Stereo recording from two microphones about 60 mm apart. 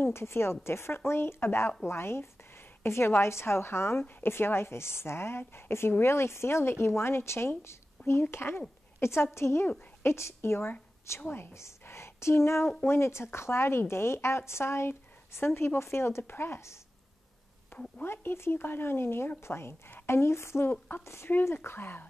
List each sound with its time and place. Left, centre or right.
0.0 s a woman's voice: left
11.8 s a woman's voice: left
18.0 s a woman's voice: left